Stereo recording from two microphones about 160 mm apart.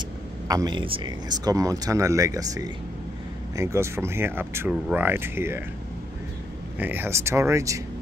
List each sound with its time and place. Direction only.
0.5 s speech: 25° right (ahead or behind)
6.8 s speech: 15° right (ahead or behind)